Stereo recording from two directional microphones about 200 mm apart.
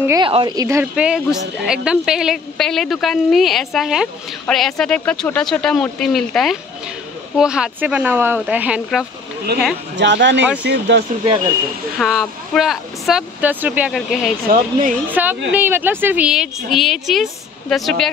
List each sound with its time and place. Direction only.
0.0 s a woman's voice: 15° right (ahead or behind)
9.9 s speech: 60° right (ahead or behind)
12.0 s a woman's voice: centre (ahead or behind)
14.5 s speech: 40° right (ahead or behind)
15.0 s a woman's voice: 10° right (ahead or behind)